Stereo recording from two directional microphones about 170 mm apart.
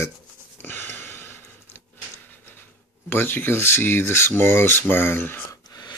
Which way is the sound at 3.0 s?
10° left (ahead or behind).